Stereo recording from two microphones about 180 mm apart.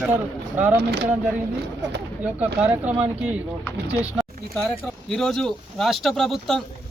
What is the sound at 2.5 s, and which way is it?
Speech, 10° right (ahead or behind).